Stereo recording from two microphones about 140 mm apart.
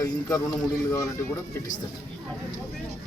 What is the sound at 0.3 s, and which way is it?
Speech, 15° left (ahead or behind).